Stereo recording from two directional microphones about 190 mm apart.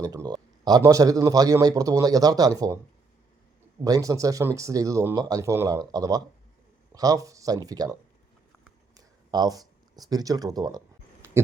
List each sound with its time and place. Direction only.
0.0 s a man's voice: 20° right (ahead or behind)
3.8 s a man's voice: 20° right (ahead or behind)
9.0 s speech: 20° right (ahead or behind)